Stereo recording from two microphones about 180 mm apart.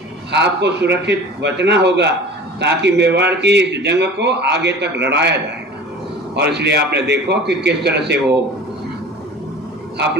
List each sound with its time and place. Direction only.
0.3 s a man's voice: 70° right (ahead or behind)